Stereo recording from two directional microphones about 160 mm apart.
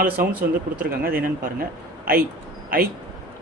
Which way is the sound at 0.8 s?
65° right (ahead or behind).